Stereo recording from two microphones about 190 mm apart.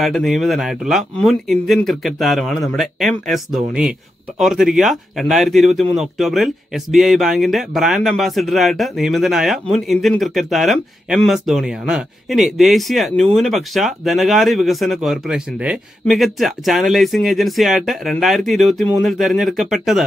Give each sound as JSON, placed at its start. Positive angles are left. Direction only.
{"t": 0.0, "sound": "speech", "side_deg": 0}